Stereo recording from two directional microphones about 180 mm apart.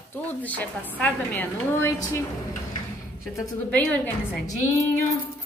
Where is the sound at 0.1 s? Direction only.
10° left (ahead or behind).